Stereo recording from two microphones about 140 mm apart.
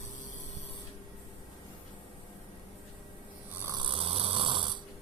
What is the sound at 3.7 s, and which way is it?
Snoring, 40° right (ahead or behind).